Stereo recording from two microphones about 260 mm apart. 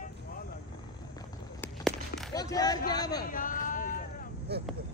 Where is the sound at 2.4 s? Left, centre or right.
Centre.